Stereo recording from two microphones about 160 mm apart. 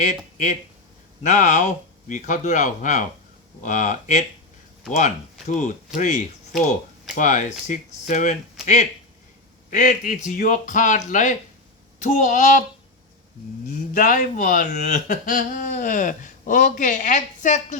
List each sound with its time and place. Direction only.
0.0 s speech: 50° left (ahead or behind)
13.7 s speech: 55° left (ahead or behind)